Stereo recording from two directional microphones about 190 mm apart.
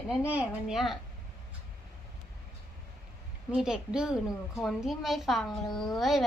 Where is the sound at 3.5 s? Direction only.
5° right (ahead or behind).